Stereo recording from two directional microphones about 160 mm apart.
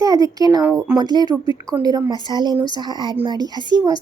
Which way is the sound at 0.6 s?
5° right (ahead or behind).